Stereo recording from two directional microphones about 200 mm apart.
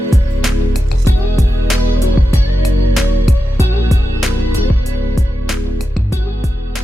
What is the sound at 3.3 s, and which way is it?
Music, centre (ahead or behind).